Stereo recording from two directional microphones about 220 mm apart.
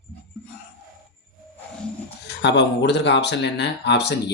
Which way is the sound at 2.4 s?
50° left (ahead or behind).